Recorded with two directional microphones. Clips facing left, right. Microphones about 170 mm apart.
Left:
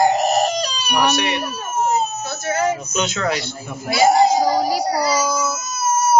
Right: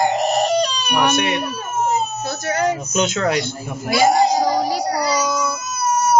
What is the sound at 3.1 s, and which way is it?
Speech, 50° right (ahead or behind).